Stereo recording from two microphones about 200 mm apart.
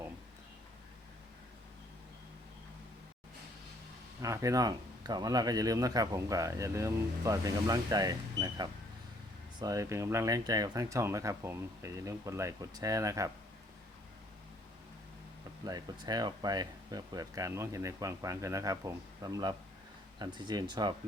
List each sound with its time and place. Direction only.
4.2 s speech: 15° right (ahead or behind)
15.6 s speech: 20° right (ahead or behind)